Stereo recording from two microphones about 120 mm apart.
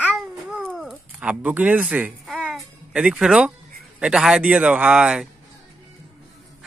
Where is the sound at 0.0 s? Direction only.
10° right (ahead or behind).